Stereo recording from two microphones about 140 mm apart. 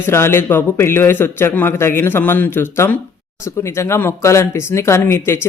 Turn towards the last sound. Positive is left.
turn(degrees=15)  # may be behind; listen again after turning